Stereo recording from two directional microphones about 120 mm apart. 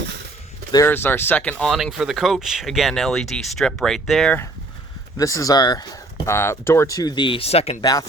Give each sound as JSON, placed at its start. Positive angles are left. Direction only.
{"t": 0.9, "sound": "speech", "side_deg": 20}
{"t": 1.7, "sound": "speech", "side_deg": 0}
{"t": 5.1, "sound": "speech", "side_deg": 30}
{"t": 7.8, "sound": "speech", "side_deg": 30}